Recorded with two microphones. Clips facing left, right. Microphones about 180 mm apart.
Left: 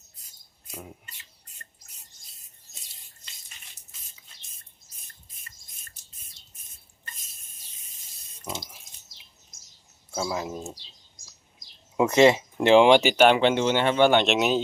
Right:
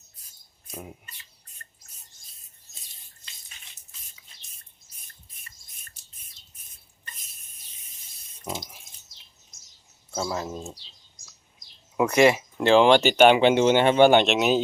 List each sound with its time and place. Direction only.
10.1 s speech: 5° left (ahead or behind)
11.9 s speech: 25° left (ahead or behind)
13.2 s speech: 5° right (ahead or behind)
14.3 s speech: centre (ahead or behind)